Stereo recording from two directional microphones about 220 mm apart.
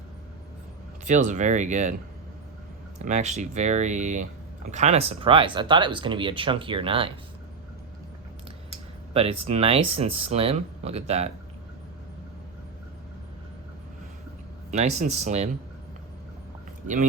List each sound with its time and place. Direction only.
1.0 s speech: 35° right (ahead or behind)
3.0 s speech: 30° right (ahead or behind)
9.1 s speech: 25° right (ahead or behind)
14.7 s speech: 30° right (ahead or behind)
16.8 s speech: 35° right (ahead or behind)